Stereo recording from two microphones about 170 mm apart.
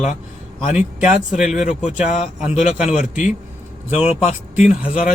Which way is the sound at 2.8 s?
45° left (ahead or behind).